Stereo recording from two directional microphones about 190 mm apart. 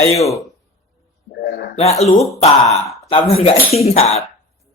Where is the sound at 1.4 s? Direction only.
55° left (ahead or behind).